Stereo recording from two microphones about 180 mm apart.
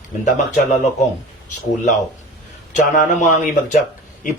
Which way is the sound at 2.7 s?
45° left (ahead or behind).